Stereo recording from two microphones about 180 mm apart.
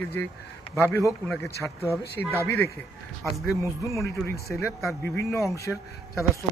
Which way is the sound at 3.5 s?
15° left (ahead or behind).